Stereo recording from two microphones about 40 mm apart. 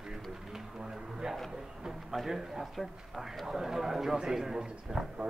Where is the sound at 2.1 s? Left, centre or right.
Centre.